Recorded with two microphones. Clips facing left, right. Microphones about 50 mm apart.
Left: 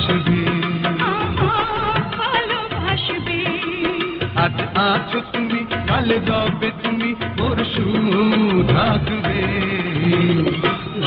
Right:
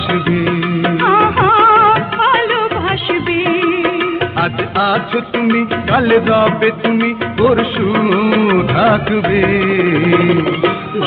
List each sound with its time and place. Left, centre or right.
0.4 s music: centre
1.1 s music: right
2.1 s music of bollywood: right
4.4 s music: centre
5.9 s music of bollywood: right